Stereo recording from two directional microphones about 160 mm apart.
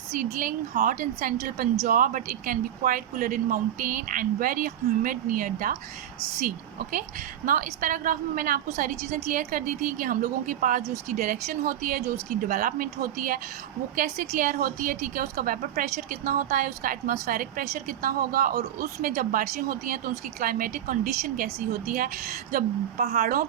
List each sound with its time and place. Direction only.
0.2 s a woman's voice: 60° right (ahead or behind)
7.4 s a woman's voice: 60° right (ahead or behind)